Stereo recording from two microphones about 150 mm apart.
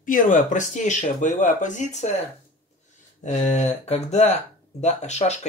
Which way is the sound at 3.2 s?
50° left (ahead or behind).